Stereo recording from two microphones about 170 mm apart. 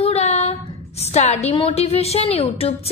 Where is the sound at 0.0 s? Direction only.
40° left (ahead or behind).